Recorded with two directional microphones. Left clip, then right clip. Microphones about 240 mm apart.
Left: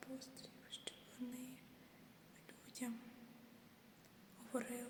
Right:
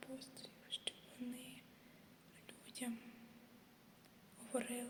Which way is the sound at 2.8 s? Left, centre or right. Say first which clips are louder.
Right 1 dB; centre.